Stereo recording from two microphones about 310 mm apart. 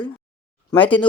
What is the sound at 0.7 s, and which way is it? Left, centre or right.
Speech, centre.